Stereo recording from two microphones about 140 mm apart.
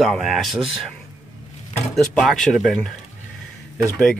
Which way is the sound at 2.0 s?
Centre (ahead or behind).